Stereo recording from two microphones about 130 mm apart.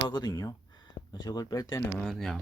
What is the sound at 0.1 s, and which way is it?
Speech, 30° left (ahead or behind).